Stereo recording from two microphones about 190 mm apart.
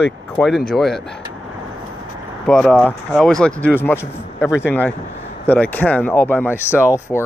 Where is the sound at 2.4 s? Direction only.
5° left (ahead or behind).